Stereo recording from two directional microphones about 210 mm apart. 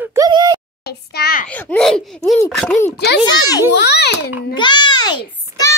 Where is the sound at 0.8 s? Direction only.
50° left (ahead or behind).